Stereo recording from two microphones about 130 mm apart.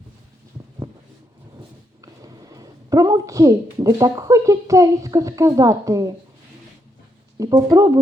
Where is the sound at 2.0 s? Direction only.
30° right (ahead or behind).